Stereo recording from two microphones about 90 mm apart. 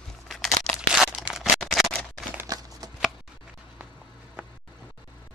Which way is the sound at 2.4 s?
40° right (ahead or behind).